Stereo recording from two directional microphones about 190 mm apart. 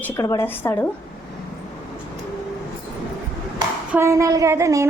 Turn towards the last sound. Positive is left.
turn(degrees=-15)  # may be behind; listen again after turning